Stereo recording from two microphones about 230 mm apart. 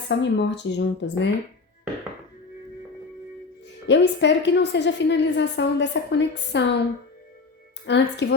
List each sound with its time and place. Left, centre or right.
0.1 s a woman's voice: left
3.8 s a woman's voice: left
7.9 s a woman's voice: left